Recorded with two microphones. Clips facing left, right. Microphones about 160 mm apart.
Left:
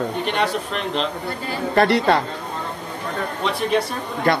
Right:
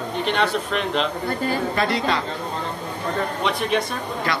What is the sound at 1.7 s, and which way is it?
Speech, 60° left (ahead or behind).